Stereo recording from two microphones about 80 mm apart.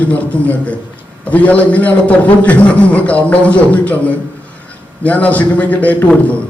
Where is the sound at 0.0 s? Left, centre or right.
Centre.